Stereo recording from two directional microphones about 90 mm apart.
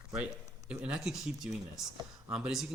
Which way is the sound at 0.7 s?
5° right (ahead or behind).